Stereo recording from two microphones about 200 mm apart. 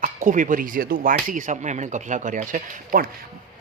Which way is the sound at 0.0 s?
40° right (ahead or behind).